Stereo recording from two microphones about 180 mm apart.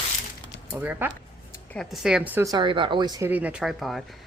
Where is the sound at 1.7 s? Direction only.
Centre (ahead or behind).